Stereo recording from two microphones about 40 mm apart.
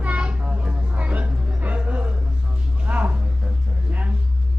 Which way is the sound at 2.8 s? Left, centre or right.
Right.